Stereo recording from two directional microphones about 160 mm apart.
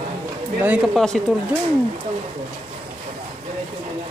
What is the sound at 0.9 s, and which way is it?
Speech, centre (ahead or behind).